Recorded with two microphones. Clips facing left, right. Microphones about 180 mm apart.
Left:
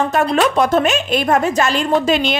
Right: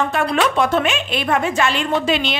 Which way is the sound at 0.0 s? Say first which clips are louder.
Left 3 dB; 40° left (ahead or behind).